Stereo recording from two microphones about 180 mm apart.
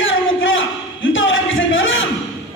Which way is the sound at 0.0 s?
90° left.